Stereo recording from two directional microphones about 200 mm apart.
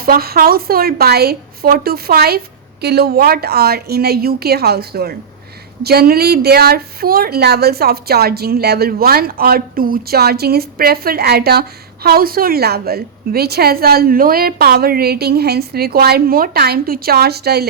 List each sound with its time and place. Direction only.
0.0 s speech: 50° right (ahead or behind)